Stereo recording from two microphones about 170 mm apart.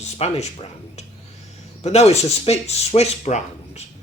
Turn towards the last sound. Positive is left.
turn(degrees=40)  # may be behind; listen again after turning